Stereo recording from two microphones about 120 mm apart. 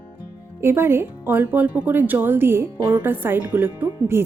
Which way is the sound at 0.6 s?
20° right (ahead or behind).